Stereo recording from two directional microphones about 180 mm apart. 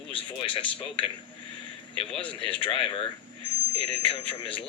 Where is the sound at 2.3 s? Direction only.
30° left (ahead or behind).